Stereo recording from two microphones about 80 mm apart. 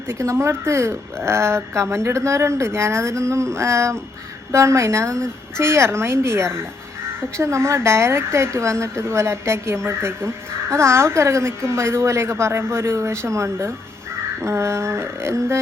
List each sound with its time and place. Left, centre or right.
0.1 s speech: right